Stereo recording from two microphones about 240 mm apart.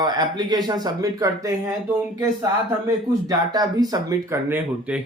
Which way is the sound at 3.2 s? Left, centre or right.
Centre.